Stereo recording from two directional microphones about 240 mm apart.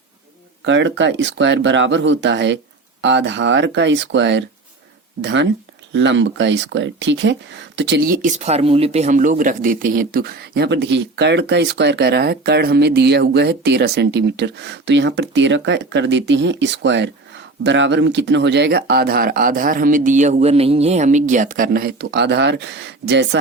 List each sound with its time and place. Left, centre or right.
0.6 s speech: right